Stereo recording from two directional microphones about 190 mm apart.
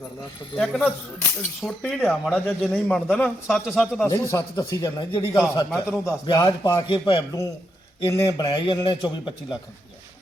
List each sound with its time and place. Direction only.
0.5 s speech: centre (ahead or behind); by 9.0 s 25° left (ahead or behind)